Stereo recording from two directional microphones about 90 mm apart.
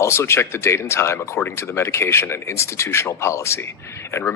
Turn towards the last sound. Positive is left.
turn(degrees=30)  # may be behind; listen again after turning